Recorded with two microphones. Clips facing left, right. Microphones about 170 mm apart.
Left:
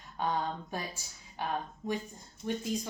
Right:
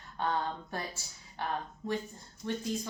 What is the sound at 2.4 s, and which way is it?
Speech, 15° left (ahead or behind).